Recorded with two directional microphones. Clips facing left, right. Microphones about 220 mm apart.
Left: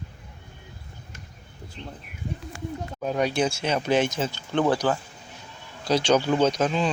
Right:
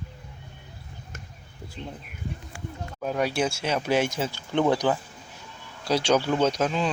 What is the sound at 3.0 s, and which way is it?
Speech, 5° right (ahead or behind).